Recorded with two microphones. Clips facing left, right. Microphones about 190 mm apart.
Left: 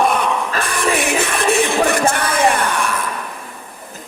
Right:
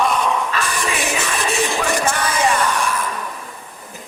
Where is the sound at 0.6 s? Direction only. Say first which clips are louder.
Left 4 dB; 60° left (ahead or behind).